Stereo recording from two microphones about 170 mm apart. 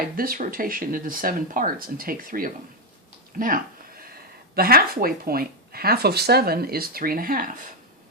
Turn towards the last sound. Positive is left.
turn(degrees=-55)  # may be behind; listen again after turning